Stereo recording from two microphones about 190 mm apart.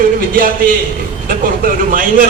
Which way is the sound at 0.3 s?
45° right (ahead or behind).